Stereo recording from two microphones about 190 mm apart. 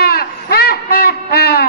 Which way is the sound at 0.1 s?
55° left (ahead or behind).